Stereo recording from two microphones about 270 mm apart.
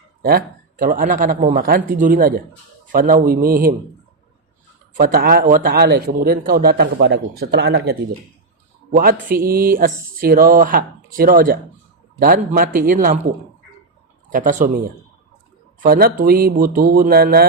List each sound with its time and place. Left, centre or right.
0.2 s a man's voice: right
4.9 s a man's voice: right
14.3 s speech: right
15.8 s a man's voice: right